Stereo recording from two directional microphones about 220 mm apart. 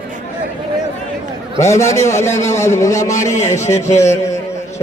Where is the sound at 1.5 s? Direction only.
15° left (ahead or behind).